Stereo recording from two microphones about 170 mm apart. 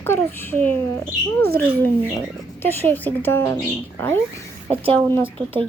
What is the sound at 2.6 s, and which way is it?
Speech, 10° left (ahead or behind).